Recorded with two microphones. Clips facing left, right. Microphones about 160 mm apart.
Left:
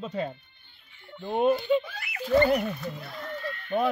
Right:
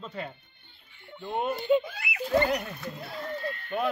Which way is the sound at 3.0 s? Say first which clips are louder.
Right 1 dB; 30° right (ahead or behind).